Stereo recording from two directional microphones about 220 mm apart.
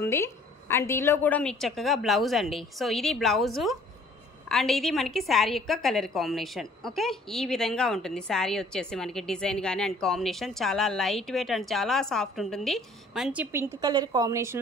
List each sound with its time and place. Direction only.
0.0 s a woman's voice: 10° left (ahead or behind); by 14.6 s 10° right (ahead or behind)